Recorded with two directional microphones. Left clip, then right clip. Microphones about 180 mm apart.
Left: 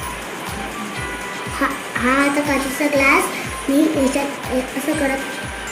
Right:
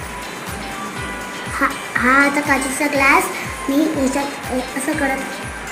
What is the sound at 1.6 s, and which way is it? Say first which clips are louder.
A woman's voice: right 3 dB; centre (ahead or behind).